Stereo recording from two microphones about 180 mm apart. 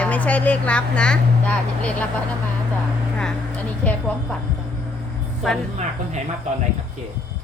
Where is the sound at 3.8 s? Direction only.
5° left (ahead or behind).